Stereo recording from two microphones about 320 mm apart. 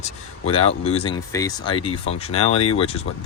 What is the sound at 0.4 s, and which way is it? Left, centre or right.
Speech, centre.